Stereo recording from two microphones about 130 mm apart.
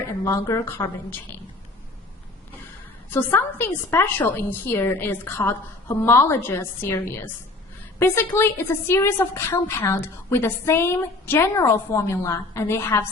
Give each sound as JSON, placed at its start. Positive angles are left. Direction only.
{"t": 0.0, "sound": "a woman's voice", "side_deg": 20}
{"t": 3.1, "sound": "a woman's voice", "side_deg": 15}